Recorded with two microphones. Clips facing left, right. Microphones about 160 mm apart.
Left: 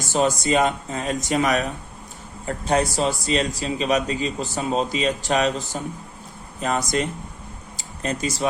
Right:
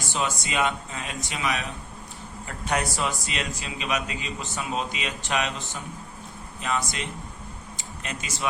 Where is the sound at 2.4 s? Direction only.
30° left (ahead or behind).